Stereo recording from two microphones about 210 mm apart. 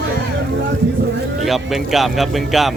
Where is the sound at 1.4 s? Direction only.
Centre (ahead or behind).